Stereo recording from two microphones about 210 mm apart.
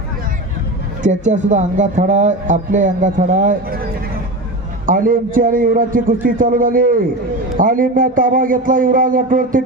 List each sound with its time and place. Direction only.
1.0 s speech: 35° right (ahead or behind)
4.9 s speech: 40° right (ahead or behind)